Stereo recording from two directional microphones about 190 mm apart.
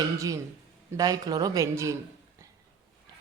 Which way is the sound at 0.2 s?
15° right (ahead or behind).